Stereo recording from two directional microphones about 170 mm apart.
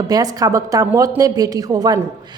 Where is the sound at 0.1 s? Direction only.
20° right (ahead or behind).